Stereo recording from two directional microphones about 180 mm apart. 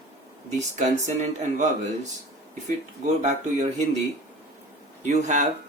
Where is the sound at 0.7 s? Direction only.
45° right (ahead or behind).